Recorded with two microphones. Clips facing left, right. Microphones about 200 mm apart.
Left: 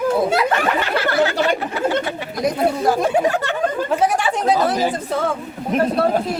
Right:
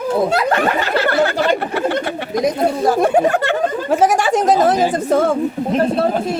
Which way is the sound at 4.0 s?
90° right.